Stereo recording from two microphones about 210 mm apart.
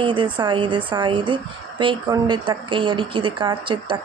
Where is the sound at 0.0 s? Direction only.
25° right (ahead or behind).